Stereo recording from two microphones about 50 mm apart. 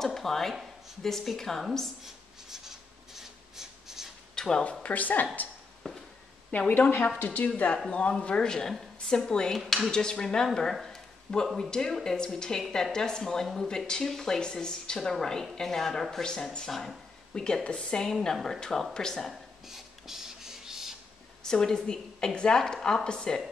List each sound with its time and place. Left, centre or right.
0.0 s speech: centre
2.0 s writing: centre
3.2 s filing: centre
4.4 s speech: centre
4.8 s speech: left
5.8 s a sound: centre
6.5 s a woman's voice: left; by 19.2 s centre
19.2 s a sound: centre
21.5 s speech: centre